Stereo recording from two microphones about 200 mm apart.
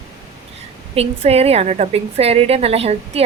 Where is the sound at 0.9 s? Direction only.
30° right (ahead or behind).